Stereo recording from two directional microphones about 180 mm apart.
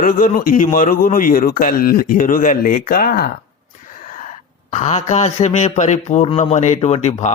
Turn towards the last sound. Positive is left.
turn(degrees=35)  # may be behind; listen again after turning